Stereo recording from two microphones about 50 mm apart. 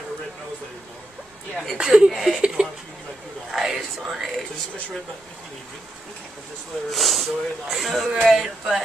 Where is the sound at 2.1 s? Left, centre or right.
Centre.